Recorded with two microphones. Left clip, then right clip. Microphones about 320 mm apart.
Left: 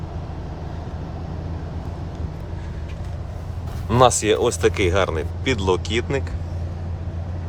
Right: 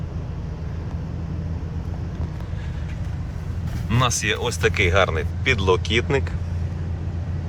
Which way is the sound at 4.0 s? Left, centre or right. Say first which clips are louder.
Left 7 dB; centre.